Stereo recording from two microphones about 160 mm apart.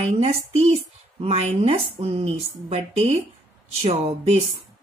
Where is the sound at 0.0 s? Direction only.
40° right (ahead or behind).